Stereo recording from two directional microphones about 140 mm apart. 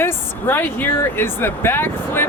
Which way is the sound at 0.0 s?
15° left (ahead or behind).